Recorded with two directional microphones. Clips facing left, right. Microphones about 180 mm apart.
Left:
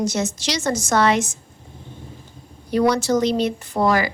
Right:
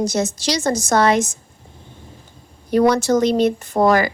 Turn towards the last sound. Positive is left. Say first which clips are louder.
# right 4 dB
turn(degrees=-50)  # may be behind; listen again after turning